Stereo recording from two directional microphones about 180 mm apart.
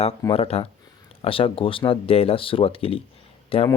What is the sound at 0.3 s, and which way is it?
Speech, 35° left (ahead or behind).